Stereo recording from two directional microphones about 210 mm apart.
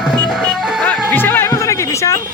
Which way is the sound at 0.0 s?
Centre (ahead or behind).